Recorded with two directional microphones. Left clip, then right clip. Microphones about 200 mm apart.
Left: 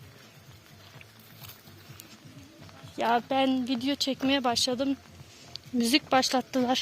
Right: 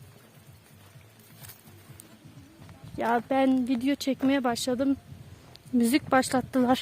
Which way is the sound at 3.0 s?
30° right (ahead or behind).